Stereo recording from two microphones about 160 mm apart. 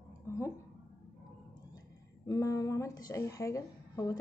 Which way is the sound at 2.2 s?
20° left (ahead or behind).